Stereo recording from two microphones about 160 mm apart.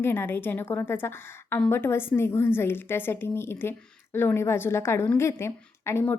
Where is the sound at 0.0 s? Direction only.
15° left (ahead or behind).